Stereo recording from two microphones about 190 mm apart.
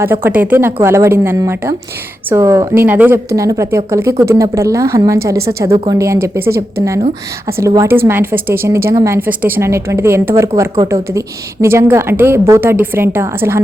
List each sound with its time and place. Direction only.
0.0 s a woman's voice: 10° right (ahead or behind)
11.6 s a woman's voice: 15° right (ahead or behind)